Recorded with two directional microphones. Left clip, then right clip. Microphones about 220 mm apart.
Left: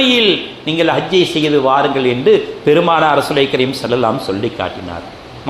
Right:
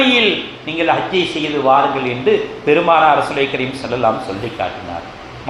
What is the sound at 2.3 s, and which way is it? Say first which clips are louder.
A man's voice: left 2 dB; 55° left (ahead or behind).